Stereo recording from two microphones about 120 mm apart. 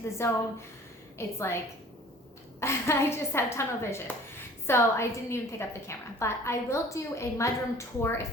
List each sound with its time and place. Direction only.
0.2 s a woman's voice: 20° left (ahead or behind)
2.6 s a woman's voice: 20° left (ahead or behind)